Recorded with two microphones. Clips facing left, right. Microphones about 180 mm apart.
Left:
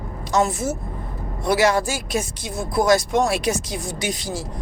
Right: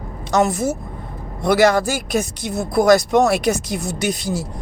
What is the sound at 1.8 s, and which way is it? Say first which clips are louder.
Speech: right 4 dB; 65° right (ahead or behind).